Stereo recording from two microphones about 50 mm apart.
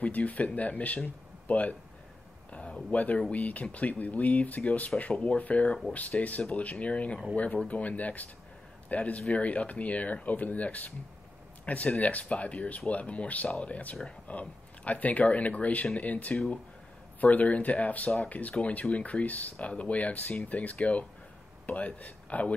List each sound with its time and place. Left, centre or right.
0.0 s a man's voice: left